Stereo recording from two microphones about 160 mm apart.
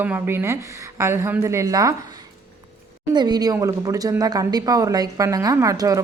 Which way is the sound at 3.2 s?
25° right (ahead or behind).